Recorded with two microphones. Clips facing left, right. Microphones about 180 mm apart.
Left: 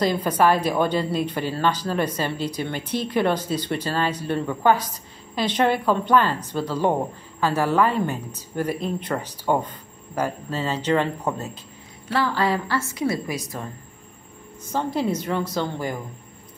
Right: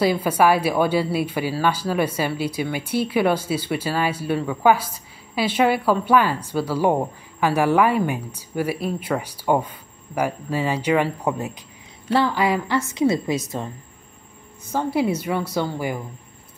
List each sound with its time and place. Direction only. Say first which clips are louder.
0.0 s a woman's voice: right 2 dB; 10° right (ahead or behind)
14.7 s speech: right 2 dB; 10° right (ahead or behind)